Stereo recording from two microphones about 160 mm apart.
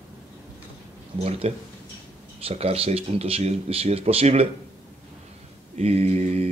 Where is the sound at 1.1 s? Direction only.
40° right (ahead or behind).